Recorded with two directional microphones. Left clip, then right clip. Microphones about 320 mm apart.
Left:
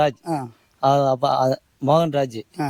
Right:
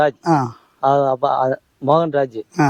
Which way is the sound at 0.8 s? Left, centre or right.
Left.